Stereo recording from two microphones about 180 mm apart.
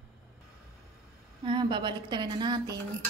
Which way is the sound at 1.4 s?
25° right (ahead or behind).